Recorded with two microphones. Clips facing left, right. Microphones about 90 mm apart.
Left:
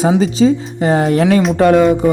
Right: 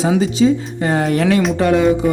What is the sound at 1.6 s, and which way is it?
Speech, 55° left (ahead or behind).